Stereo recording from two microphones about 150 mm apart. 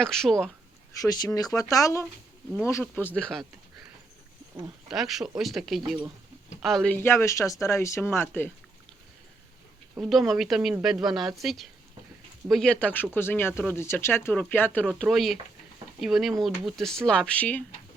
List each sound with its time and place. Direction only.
0.0 s speech: 5° left (ahead or behind)
1.0 s speech: 25° left (ahead or behind); by 3.4 s 5° left (ahead or behind)
4.9 s speech: centre (ahead or behind)
6.9 s speech: 15° left (ahead or behind)
10.0 s speech: centre (ahead or behind)